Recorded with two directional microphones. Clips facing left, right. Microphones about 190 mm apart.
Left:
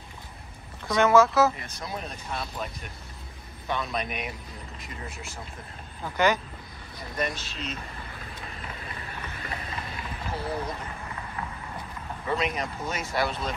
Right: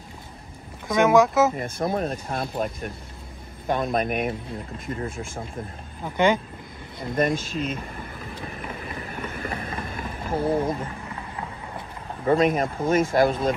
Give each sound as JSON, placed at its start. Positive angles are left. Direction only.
{"t": 0.9, "sound": "speech", "side_deg": -15}
{"t": 1.6, "sound": "speech", "side_deg": -50}
{"t": 6.0, "sound": "speech", "side_deg": -25}
{"t": 7.2, "sound": "speech", "side_deg": -50}
{"t": 9.2, "sound": "vehicle", "side_deg": -50}
{"t": 12.3, "sound": "speech", "side_deg": -45}